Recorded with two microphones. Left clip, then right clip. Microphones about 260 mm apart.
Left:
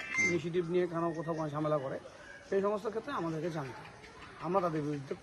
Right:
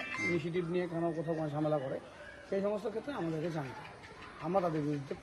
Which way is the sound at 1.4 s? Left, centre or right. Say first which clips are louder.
Left 1 dB; centre.